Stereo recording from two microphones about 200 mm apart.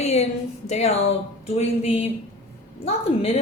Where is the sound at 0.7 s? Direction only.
30° left (ahead or behind).